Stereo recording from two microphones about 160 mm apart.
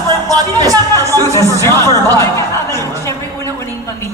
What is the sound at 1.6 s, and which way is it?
Speech, 20° left (ahead or behind).